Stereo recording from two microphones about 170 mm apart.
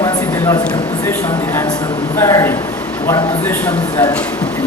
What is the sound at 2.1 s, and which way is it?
Speech, 15° left (ahead or behind).